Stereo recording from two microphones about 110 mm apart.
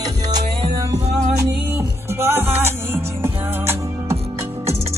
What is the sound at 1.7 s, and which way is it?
Music, 20° right (ahead or behind).